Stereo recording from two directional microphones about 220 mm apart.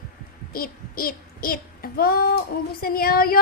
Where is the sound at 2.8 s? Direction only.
40° left (ahead or behind).